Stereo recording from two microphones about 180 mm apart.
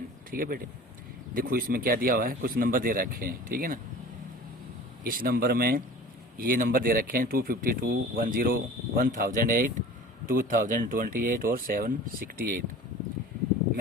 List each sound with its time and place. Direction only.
0.3 s speech: 55° right (ahead or behind)
5.0 s speech: 55° right (ahead or behind)